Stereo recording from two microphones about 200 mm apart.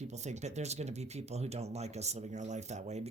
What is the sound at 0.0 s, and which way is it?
Speech, 35° right (ahead or behind).